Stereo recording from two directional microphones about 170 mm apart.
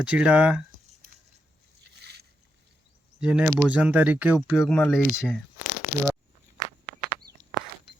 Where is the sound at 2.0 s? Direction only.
75° right (ahead or behind).